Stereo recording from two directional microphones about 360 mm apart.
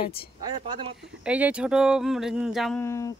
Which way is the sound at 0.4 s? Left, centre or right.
Centre.